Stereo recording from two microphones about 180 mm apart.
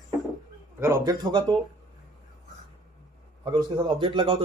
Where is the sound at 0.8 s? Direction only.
20° right (ahead or behind).